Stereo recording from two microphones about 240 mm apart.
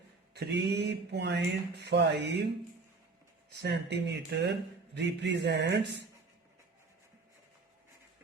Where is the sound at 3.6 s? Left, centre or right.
Right.